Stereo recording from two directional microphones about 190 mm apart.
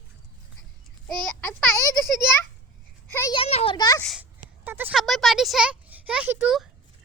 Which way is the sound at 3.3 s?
30° left (ahead or behind).